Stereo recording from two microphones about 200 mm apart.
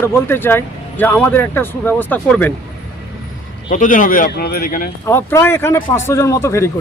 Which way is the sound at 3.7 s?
40° left (ahead or behind).